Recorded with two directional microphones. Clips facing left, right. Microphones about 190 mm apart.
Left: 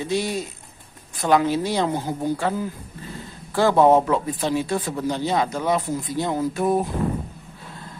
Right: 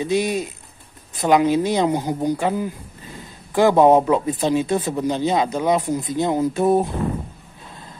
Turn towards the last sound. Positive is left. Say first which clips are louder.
# right 4 dB
turn(degrees=-25)  # may be behind; listen again after turning